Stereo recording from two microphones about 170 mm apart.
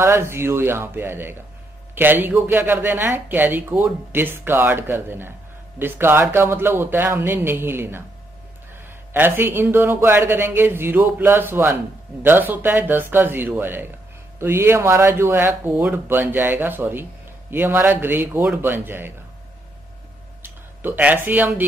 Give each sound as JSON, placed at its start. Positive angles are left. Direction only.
{"t": 0.0, "sound": "speech", "side_deg": -15}
{"t": 9.1, "sound": "speech", "side_deg": -10}
{"t": 20.4, "sound": "speech", "side_deg": -10}